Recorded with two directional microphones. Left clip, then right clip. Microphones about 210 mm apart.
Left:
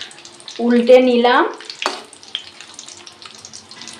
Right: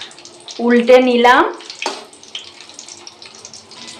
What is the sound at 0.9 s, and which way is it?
Speech, 5° right (ahead or behind).